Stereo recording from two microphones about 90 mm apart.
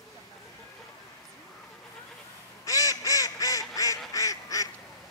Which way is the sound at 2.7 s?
40° left (ahead or behind).